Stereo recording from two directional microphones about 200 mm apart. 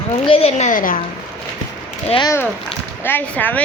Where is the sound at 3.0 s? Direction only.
10° left (ahead or behind).